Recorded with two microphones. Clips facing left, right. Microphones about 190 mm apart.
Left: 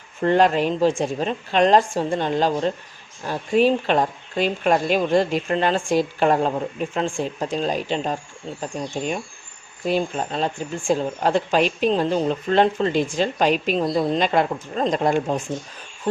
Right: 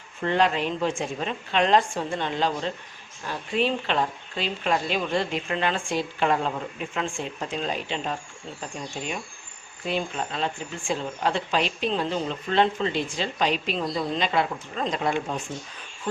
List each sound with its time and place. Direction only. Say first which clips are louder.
0.2 s speech: left 6 dB; 45° left (ahead or behind)
9.8 s speech: left 6 dB; 40° left (ahead or behind)